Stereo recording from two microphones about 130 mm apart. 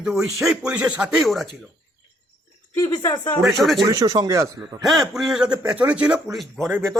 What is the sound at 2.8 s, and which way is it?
Speech, 30° left (ahead or behind).